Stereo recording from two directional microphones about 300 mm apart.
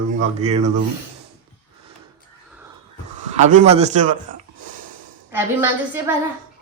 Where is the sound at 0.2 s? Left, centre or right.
Right.